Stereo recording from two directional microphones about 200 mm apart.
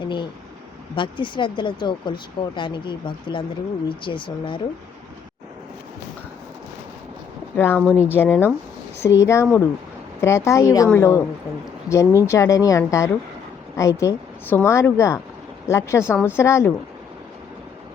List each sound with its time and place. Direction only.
0.9 s speech: 25° left (ahead or behind)
3.8 s speech: 25° left (ahead or behind)
7.5 s a woman's voice: 10° left (ahead or behind)